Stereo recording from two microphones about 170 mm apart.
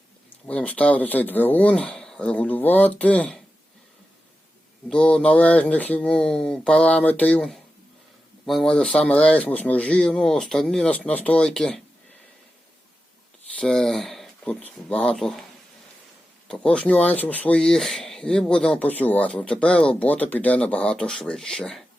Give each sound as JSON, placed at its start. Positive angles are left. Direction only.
{"t": 0.4, "sound": "speech", "side_deg": 10}
{"t": 4.9, "sound": "speech", "side_deg": 5}
{"t": 13.6, "sound": "speech", "side_deg": 5}
{"t": 16.5, "sound": "speech", "side_deg": 5}